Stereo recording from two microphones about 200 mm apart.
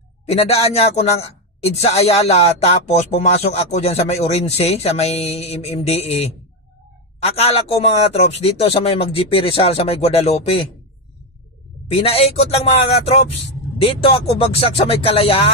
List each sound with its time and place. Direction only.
0.3 s a woman's voice: 30° left (ahead or behind)
11.9 s a woman's voice: 30° left (ahead or behind)